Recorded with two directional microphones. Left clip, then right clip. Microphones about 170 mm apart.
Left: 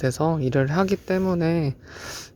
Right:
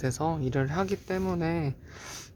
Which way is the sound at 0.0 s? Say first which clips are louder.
Left 7 dB; 20° left (ahead or behind).